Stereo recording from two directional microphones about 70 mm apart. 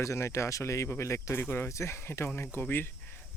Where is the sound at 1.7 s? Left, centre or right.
Left.